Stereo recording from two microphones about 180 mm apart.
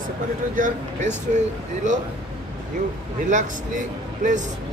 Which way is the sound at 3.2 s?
45° right (ahead or behind).